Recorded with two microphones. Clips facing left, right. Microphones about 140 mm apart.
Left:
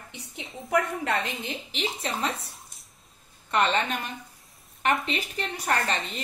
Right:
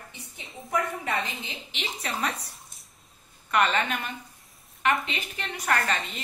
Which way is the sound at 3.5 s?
30° left (ahead or behind).